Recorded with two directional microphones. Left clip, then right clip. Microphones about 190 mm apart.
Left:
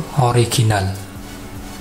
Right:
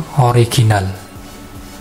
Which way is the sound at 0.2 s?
10° right (ahead or behind).